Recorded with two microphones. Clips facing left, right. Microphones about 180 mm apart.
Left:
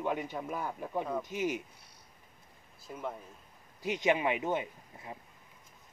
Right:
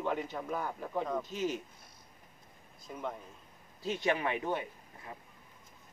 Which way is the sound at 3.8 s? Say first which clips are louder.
Left 3 dB; 15° left (ahead or behind).